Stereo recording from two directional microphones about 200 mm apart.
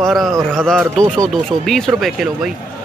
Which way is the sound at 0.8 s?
15° right (ahead or behind).